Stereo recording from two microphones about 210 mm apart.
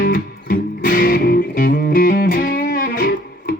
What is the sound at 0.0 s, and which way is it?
Music, 45° left (ahead or behind).